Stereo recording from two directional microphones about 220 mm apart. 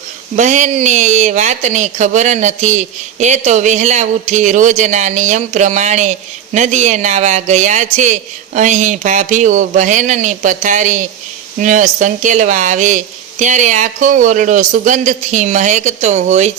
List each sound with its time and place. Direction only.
0.3 s speech: 35° right (ahead or behind)